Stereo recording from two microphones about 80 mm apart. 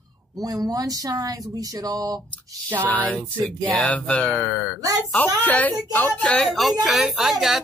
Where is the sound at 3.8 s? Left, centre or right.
Centre.